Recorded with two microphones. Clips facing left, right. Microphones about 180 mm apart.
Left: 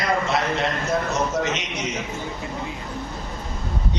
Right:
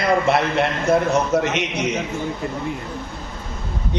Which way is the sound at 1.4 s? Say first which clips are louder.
Right 4 dB; 60° right (ahead or behind).